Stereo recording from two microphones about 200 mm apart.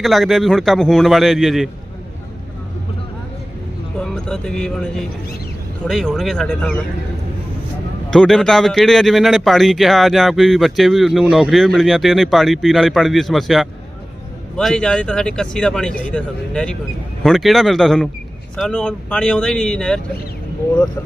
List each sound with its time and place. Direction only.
0.0 s speech: centre (ahead or behind)
3.9 s speech: 5° left (ahead or behind)
8.1 s speech: 5° left (ahead or behind)